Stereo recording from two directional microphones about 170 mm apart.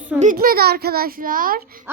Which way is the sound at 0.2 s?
55° right (ahead or behind).